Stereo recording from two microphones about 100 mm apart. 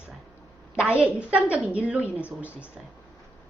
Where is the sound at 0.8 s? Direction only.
10° right (ahead or behind).